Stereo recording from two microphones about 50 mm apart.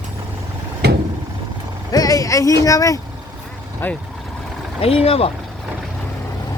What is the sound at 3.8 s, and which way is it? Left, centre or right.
Speech, left.